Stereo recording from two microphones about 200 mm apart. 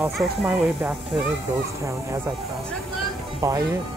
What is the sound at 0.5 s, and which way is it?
Speech, 15° right (ahead or behind).